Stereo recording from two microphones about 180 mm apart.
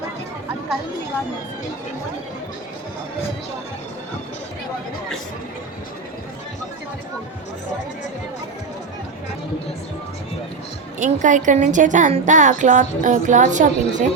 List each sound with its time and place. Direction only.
11.0 s a woman's voice: 45° right (ahead or behind)